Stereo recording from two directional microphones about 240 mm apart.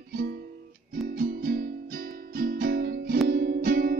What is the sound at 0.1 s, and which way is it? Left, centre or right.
Music, right.